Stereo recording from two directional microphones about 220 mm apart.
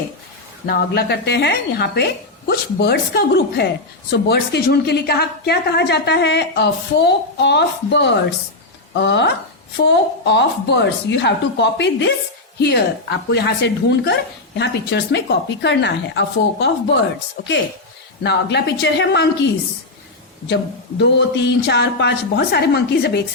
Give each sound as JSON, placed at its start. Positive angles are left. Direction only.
{"t": 0.7, "sound": "a woman's voice", "side_deg": 45}
{"t": 18.2, "sound": "a woman's voice", "side_deg": 50}
{"t": 21.0, "sound": "a woman's voice", "side_deg": 50}